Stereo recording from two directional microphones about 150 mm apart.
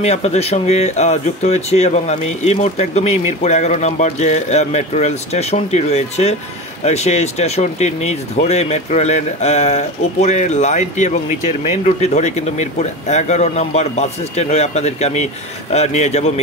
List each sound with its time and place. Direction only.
0.0 s speech: 45° left (ahead or behind)